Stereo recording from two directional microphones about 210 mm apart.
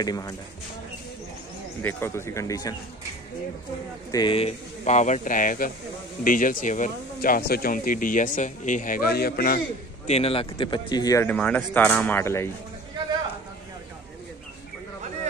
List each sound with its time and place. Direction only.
0.0 s speech: 20° left (ahead or behind)
1.8 s speech: 10° left (ahead or behind)
4.1 s speech: 20° left (ahead or behind); by 9.6 s 45° left (ahead or behind)
10.0 s speech: 30° left (ahead or behind); by 12.4 s 10° left (ahead or behind)